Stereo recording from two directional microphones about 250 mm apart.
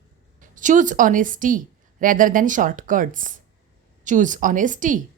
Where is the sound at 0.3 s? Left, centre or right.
Right.